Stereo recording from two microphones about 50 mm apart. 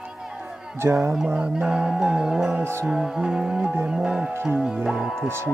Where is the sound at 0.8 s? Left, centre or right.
Right.